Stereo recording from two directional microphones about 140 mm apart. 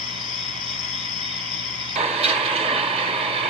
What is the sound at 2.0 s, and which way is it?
Vehicle, 45° right (ahead or behind).